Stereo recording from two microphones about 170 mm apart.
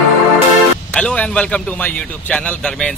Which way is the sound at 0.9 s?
5° left (ahead or behind).